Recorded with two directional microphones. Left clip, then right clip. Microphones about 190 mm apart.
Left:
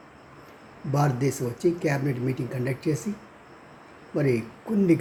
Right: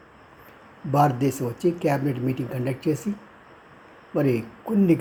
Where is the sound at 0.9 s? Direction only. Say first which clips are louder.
Right 5 dB; 15° right (ahead or behind).